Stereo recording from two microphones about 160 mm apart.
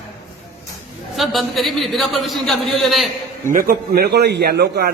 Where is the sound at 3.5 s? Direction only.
60° right (ahead or behind); by 4.9 s 80° right.